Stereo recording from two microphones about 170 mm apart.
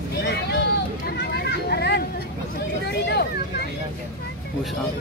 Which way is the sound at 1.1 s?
70° left (ahead or behind).